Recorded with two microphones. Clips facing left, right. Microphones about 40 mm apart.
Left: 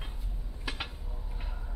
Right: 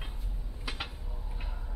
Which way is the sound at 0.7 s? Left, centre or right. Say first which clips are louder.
Left 1 dB; centre.